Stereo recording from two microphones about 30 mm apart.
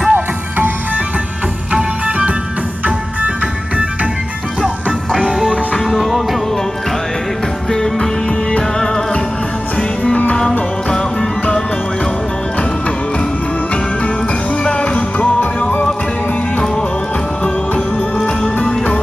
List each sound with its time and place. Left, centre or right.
0.1 s music: right
2.0 s music: right
5.3 s music: centre
7.7 s music: centre
10.9 s music: centre
14.6 s music: left